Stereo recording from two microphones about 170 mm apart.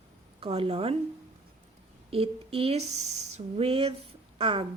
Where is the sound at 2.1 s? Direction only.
35° right (ahead or behind).